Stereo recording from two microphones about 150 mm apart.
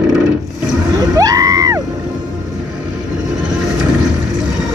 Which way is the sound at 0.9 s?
25° right (ahead or behind).